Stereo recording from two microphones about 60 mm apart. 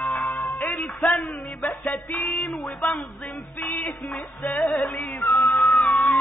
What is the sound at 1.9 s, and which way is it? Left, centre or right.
Music, left.